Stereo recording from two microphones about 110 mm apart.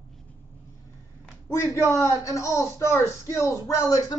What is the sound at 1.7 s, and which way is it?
Speech, 25° left (ahead or behind).